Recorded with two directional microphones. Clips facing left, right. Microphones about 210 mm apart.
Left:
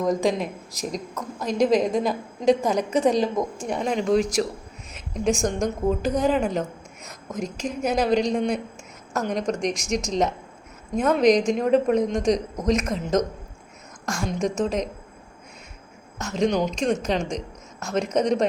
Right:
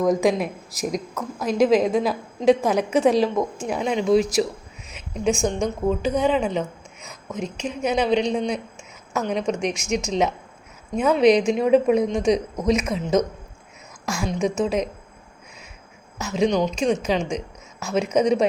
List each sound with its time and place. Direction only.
0.0 s a woman's voice: 10° right (ahead or behind)
5.3 s speech: 40° left (ahead or behind)
5.9 s a woman's voice: centre (ahead or behind)
7.3 s speech: 40° left (ahead or behind)
7.8 s a woman's voice: 5° left (ahead or behind)
9.6 s speech: 35° left (ahead or behind)
10.9 s a woman's voice: centre (ahead or behind)
16.1 s a woman's voice: 5° right (ahead or behind)
17.3 s a sound: 5° right (ahead or behind)
18.1 s a woman's voice: 5° right (ahead or behind)